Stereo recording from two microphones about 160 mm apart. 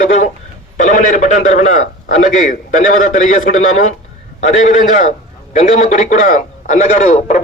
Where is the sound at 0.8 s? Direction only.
50° left (ahead or behind).